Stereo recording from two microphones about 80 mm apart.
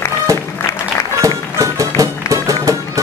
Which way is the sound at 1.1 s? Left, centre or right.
Right.